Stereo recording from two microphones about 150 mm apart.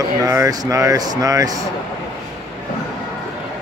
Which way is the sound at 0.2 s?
20° right (ahead or behind).